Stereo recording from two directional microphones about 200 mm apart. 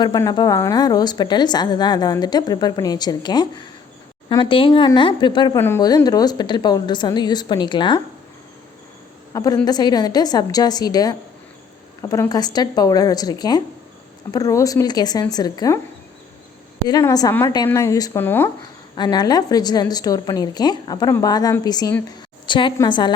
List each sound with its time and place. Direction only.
0.0 s a woman's voice: 20° left (ahead or behind)
5.5 s a woman's voice: 10° left (ahead or behind)
9.3 s a woman's voice: 20° left (ahead or behind)
16.9 s a woman's voice: 20° left (ahead or behind)
18.9 s a woman's voice: 20° left (ahead or behind)